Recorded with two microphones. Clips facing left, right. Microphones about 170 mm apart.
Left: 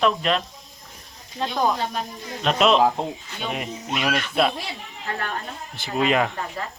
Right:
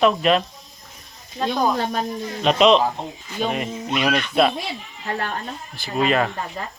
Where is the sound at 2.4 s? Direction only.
Centre (ahead or behind).